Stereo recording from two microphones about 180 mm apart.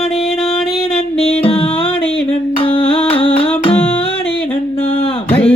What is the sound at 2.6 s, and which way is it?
Humming, 30° left (ahead or behind).